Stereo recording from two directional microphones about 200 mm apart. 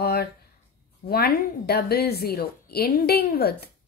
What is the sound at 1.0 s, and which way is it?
A woman's voice, 50° left (ahead or behind).